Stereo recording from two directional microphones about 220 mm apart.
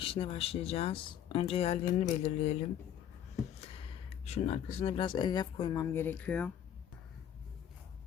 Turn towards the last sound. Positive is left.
turn(degrees=5)  # may be behind; listen again after turning